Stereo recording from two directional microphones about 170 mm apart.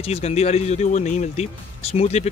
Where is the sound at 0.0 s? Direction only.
40° left (ahead or behind).